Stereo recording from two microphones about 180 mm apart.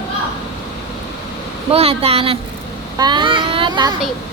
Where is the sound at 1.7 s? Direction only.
35° right (ahead or behind).